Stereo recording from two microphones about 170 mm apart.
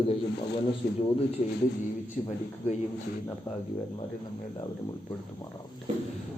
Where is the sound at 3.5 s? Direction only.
25° left (ahead or behind).